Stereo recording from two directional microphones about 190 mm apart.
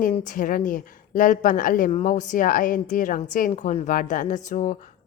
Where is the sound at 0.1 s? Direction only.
40° left (ahead or behind).